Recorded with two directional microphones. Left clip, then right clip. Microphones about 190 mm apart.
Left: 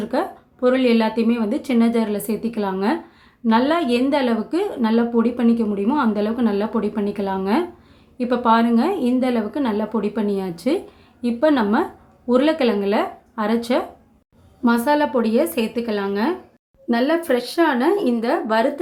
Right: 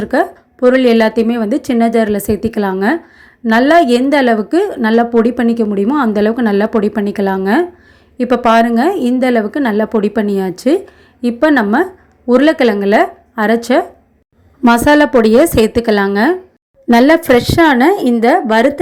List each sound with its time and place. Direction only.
0.0 s a woman's voice: 35° right (ahead or behind)
14.6 s a woman's voice: 45° right (ahead or behind)